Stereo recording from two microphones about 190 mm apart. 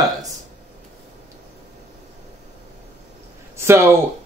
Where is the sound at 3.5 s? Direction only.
15° right (ahead or behind).